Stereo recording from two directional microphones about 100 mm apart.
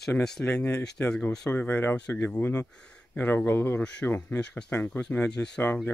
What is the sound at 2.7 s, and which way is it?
Speech, 10° left (ahead or behind).